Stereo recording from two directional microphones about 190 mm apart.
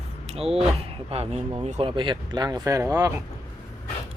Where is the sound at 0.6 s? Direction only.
30° right (ahead or behind).